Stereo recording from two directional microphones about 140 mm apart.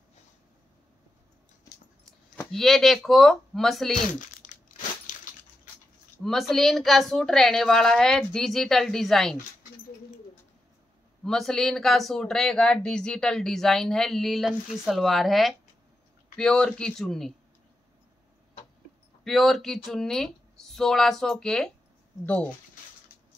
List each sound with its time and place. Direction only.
2.5 s speech: centre (ahead or behind)
4.1 s a sound: 65° left (ahead or behind)
6.2 s speech: centre (ahead or behind)
11.2 s speech: 5° left (ahead or behind)
19.2 s speech: centre (ahead or behind)